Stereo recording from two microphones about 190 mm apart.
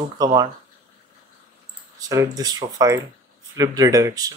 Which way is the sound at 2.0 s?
20° right (ahead or behind).